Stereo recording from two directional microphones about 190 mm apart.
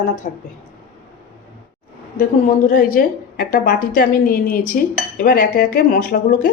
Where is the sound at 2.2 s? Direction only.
45° left (ahead or behind).